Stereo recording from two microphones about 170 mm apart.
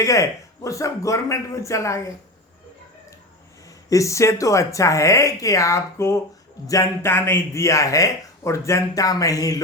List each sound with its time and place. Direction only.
0.0 s speech: 20° left (ahead or behind)
3.8 s speech: 20° left (ahead or behind)